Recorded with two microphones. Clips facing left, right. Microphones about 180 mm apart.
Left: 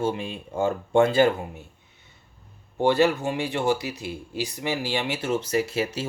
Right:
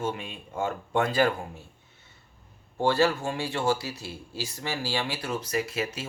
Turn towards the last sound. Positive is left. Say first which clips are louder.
# left 5 dB
turn(degrees=30)  # may be behind; listen again after turning